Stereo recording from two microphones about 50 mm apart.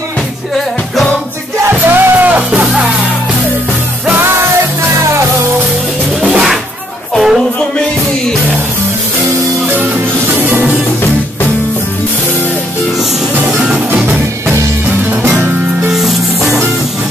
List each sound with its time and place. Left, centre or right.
1.7 s music: right
7.2 s music: centre
13.5 s music: centre
15.9 s music: centre